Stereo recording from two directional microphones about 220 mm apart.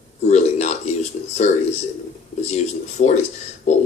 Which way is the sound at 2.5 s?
30° left (ahead or behind).